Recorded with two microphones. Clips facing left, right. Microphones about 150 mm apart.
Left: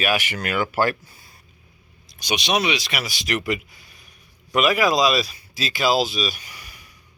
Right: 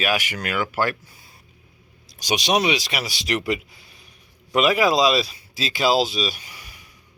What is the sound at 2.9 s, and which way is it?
Speech, 30° right (ahead or behind).